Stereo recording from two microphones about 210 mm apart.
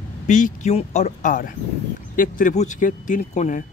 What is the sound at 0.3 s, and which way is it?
Speech, 35° left (ahead or behind).